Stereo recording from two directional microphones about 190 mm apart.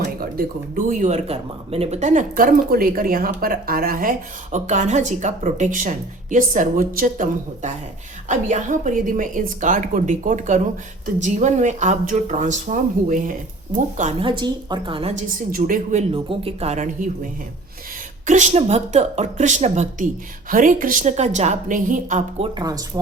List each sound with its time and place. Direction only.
0.9 s speech: 40° right (ahead or behind)
14.3 s a woman's voice: 25° right (ahead or behind)
15.1 s speech: 45° right (ahead or behind)
16.1 s speech: 30° right (ahead or behind)
18.3 s speech: 40° right (ahead or behind)
22.5 s a woman's voice: 20° right (ahead or behind)